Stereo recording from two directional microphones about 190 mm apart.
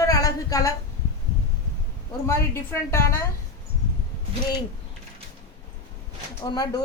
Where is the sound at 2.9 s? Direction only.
15° left (ahead or behind).